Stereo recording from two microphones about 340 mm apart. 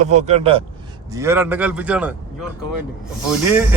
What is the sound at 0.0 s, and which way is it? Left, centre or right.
A man's voice, centre.